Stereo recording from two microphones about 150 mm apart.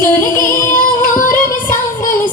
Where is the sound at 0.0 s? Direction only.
15° left (ahead or behind).